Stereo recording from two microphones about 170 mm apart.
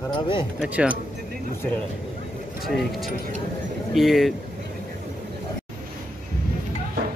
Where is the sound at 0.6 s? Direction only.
10° right (ahead or behind).